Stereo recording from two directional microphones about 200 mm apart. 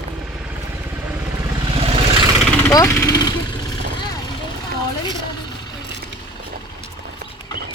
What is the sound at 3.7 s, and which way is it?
Vehicle, 20° left (ahead or behind).